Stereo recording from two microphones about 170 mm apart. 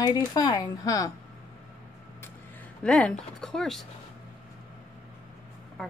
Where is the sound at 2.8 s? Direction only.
5° left (ahead or behind).